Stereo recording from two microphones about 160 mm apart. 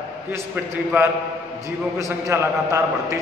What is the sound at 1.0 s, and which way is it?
A man's voice, 15° right (ahead or behind).